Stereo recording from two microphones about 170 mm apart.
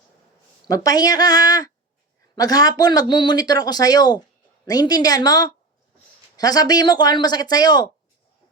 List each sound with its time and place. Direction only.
0.7 s speech: 20° left (ahead or behind)